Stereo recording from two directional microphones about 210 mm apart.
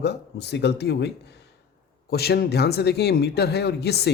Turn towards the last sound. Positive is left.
turn(degrees=50)  # may be behind; listen again after turning